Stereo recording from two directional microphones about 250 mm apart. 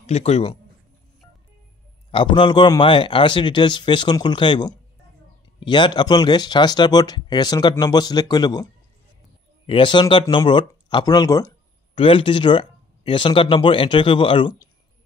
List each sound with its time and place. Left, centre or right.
0.0 s speech: left
2.0 s speech: centre
9.7 s speech: centre